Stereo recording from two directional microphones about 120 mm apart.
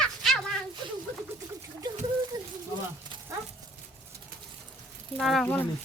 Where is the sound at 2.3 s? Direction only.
35° right (ahead or behind).